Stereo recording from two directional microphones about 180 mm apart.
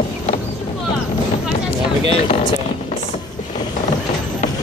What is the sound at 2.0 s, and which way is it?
Vehicle, 35° left (ahead or behind).